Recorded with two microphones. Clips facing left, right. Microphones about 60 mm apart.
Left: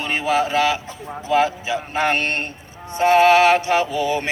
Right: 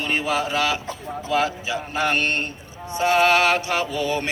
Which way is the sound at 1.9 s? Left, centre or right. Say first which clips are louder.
Left 1 dB; left.